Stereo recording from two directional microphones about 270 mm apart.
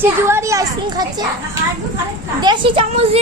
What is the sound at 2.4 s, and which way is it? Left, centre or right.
Speech, centre.